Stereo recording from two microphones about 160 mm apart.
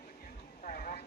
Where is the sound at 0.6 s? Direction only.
55° left (ahead or behind).